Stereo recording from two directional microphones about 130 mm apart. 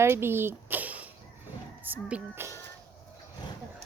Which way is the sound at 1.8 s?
10° right (ahead or behind).